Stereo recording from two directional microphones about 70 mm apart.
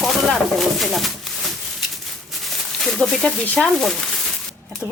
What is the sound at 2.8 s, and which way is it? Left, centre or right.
Speech, centre.